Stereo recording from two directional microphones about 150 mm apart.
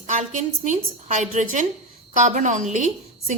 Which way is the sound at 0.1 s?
55° right (ahead or behind).